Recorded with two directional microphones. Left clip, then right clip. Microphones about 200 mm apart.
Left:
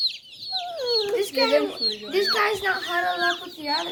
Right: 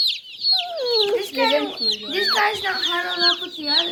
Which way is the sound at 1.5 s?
5° left (ahead or behind).